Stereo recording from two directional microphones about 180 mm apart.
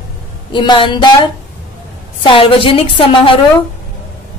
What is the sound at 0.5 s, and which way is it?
Speech, 25° left (ahead or behind).